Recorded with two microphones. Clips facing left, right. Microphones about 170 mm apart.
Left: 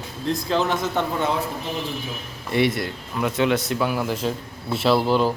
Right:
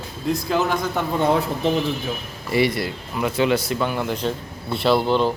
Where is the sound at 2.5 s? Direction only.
Centre (ahead or behind).